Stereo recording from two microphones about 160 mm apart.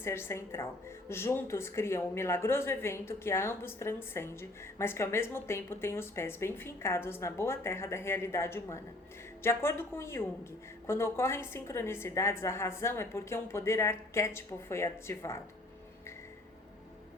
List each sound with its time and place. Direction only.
0.0 s a woman's voice: 15° left (ahead or behind)